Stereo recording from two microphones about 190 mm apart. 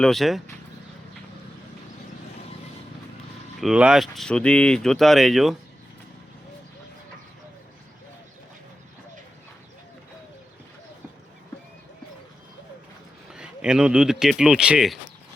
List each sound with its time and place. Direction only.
0.0 s speech: centre (ahead or behind)
3.6 s speech: 5° right (ahead or behind)
13.3 s speech: 5° right (ahead or behind)